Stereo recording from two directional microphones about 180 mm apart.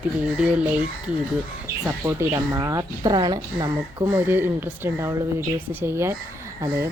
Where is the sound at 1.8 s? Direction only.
15° right (ahead or behind).